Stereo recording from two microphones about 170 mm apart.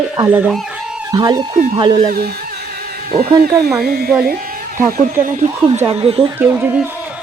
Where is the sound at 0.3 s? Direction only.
5° right (ahead or behind).